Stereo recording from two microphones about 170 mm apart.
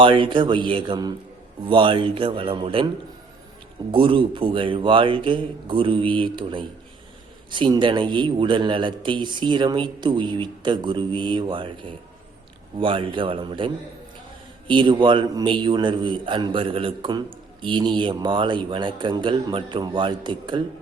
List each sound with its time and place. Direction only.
0.0 s a man's voice: 30° right (ahead or behind)
3.9 s a man's voice: 30° right (ahead or behind)